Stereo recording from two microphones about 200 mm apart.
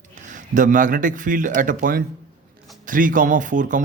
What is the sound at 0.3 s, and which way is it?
A man's voice, 40° right (ahead or behind).